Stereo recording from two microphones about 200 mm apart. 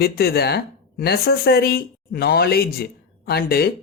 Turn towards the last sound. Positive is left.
turn(degrees=50)  # may be behind; listen again after turning